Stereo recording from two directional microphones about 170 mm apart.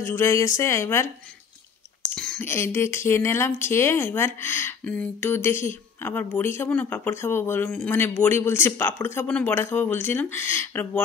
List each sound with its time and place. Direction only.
0.0 s speech: 15° left (ahead or behind)
2.1 s a sound: 5° left (ahead or behind)
2.5 s speech: 15° left (ahead or behind)